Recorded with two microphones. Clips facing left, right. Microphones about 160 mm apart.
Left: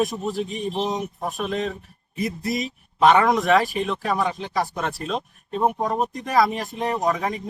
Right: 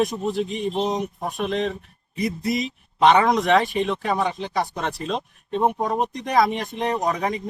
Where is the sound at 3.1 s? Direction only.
20° right (ahead or behind).